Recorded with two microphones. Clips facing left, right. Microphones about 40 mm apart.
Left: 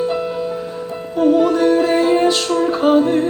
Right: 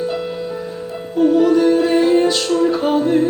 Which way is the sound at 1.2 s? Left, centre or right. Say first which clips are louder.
Right 1 dB; centre.